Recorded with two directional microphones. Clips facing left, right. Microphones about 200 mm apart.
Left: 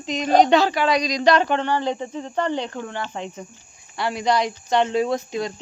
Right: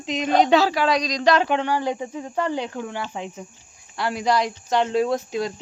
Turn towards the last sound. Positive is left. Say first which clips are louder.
# even
turn(degrees=0)  # may be behind; listen again after turning